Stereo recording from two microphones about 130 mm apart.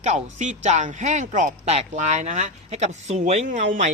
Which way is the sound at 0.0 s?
65° right (ahead or behind).